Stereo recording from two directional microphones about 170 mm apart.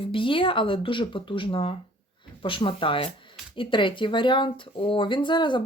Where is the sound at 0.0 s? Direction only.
30° left (ahead or behind).